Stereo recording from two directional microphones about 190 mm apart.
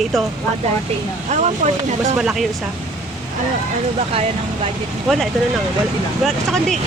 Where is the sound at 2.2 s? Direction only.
5° right (ahead or behind).